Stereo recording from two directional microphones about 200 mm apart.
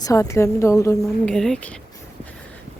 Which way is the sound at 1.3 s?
5° left (ahead or behind).